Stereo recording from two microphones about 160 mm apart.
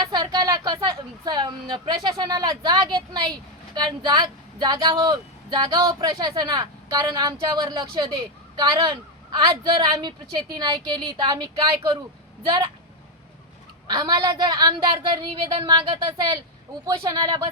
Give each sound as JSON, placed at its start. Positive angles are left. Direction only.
{"t": 0.0, "sound": "a sound", "side_deg": -25}
{"t": 2.0, "sound": "speech", "side_deg": -25}
{"t": 13.8, "sound": "speech", "side_deg": -30}